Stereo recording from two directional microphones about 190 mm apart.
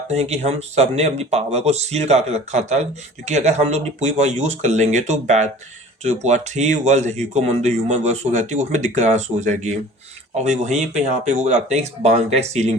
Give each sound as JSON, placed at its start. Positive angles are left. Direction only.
{"t": 0.1, "sound": "speech", "side_deg": -35}